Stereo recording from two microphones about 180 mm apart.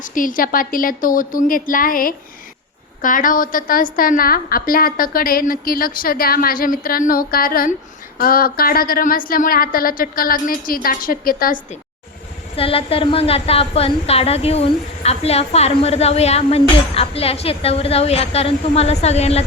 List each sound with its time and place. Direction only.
0.0 s a woman's voice: 50° left (ahead or behind)
12.5 s a woman's voice: 30° left (ahead or behind)